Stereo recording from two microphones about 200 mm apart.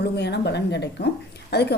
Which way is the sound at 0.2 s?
55° left (ahead or behind).